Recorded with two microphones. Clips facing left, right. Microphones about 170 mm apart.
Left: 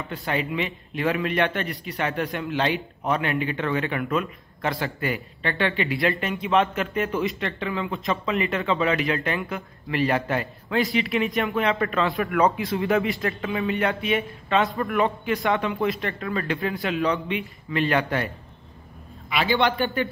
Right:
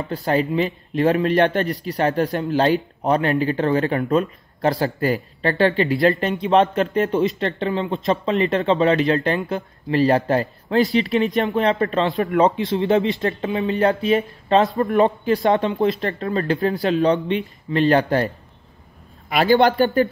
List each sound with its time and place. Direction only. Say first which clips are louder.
0.1 s speech: right 7 dB; 35° right (ahead or behind)
19.2 s a man's voice: right 7 dB; 45° right (ahead or behind)